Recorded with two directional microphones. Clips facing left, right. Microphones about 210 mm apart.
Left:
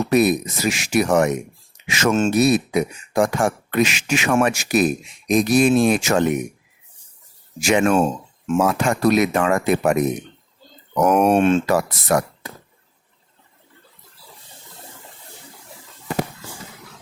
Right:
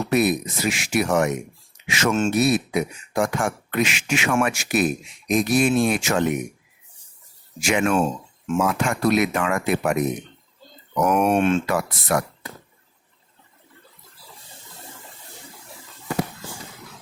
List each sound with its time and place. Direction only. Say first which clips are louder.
0.1 s speech: left 3 dB; 40° left (ahead or behind)
7.6 s speech: left 4 dB; 40° left (ahead or behind)
11.0 s speech: left 3 dB; 40° left (ahead or behind)